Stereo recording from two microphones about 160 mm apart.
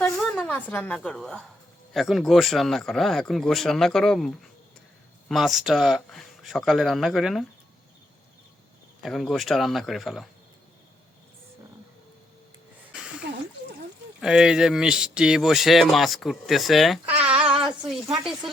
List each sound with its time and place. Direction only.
0.2 s a woman's voice: 10° left (ahead or behind)
5.3 s speech: centre (ahead or behind)
9.0 s speech: centre (ahead or behind)
12.9 s a sound: 5° right (ahead or behind)
14.2 s speech: 5° right (ahead or behind)